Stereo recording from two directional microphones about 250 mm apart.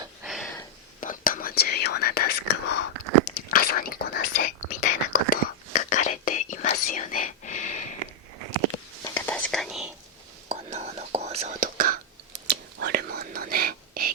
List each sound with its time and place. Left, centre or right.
0.2 s a sound: centre
1.0 s speech: left
3.5 s whispering: left
9.1 s whispering: centre
10.5 s whispering: right